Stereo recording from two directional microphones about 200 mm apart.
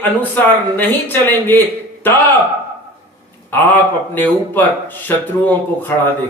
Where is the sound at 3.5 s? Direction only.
10° left (ahead or behind).